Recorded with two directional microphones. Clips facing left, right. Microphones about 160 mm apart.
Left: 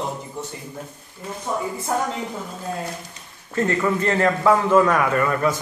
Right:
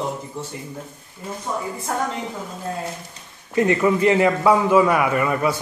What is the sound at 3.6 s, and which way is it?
A man's voice, 15° right (ahead or behind).